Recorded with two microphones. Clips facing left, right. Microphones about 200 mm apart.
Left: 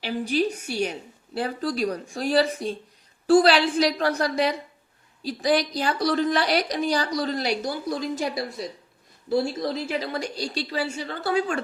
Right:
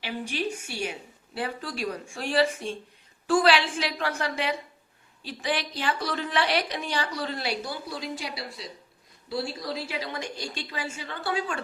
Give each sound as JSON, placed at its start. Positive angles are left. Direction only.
{"t": 0.0, "sound": "a woman's voice", "side_deg": 40}